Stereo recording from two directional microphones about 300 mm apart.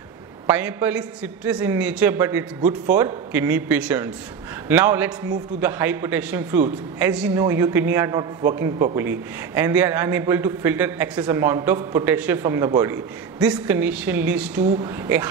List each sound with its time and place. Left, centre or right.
0.5 s a man's voice: centre
14.6 s speech: right